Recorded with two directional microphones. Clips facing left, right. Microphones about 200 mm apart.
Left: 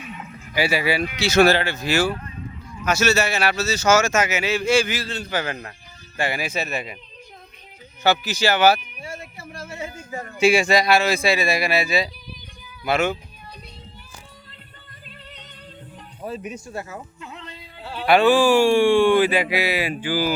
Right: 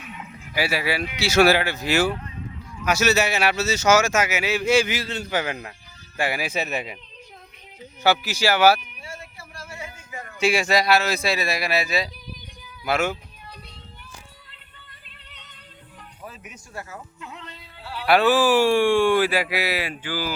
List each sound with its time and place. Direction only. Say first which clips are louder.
0.2 s dog: left 2 dB; 15° right (ahead or behind)
0.5 s speech: left 3 dB; 5° right (ahead or behind)
8.0 s speech: left 1 dB; 10° right (ahead or behind)
9.0 s a sound: left 4 dB; 15° left (ahead or behind)
9.9 s a sound: left 6 dB; 40° left (ahead or behind)
10.4 s speech: left 3 dB; centre (ahead or behind)
16.2 s speech: left 12 dB; 30° left (ahead or behind)
17.2 s music: left 1 dB; 5° right (ahead or behind)
17.6 s a sound: left 3 dB; 20° left (ahead or behind)
18.0 s speech: left 2 dB; centre (ahead or behind)
19.8 s speech: left 6 dB; 15° left (ahead or behind)